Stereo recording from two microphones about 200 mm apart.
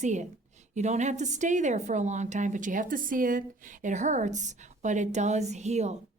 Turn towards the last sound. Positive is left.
turn(degrees=-35)  # may be behind; listen again after turning